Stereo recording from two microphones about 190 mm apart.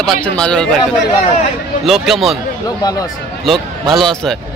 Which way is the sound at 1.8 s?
Centre (ahead or behind).